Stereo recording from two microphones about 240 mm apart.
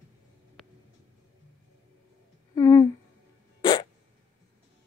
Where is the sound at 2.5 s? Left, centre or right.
Centre.